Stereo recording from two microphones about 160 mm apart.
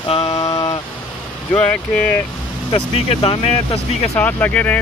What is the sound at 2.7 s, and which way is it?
Speech, 35° left (ahead or behind).